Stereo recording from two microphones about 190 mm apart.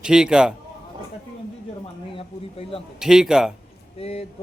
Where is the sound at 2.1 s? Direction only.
30° left (ahead or behind).